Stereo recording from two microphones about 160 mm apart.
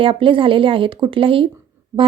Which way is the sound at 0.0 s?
35° right (ahead or behind).